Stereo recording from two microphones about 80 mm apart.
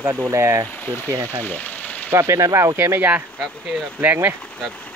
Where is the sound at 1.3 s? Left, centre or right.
Left.